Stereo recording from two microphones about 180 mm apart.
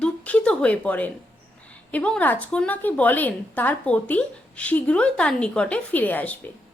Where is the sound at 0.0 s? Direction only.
5° left (ahead or behind).